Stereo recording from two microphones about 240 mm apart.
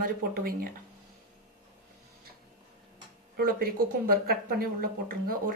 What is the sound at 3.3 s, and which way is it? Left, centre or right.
Speech, right.